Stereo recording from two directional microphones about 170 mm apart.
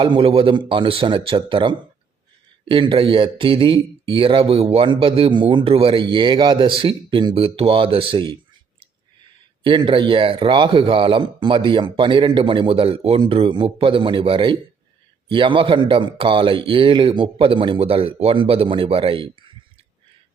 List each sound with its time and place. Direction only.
0.0 s speech: 30° right (ahead or behind)
9.6 s a man's voice: 30° right (ahead or behind)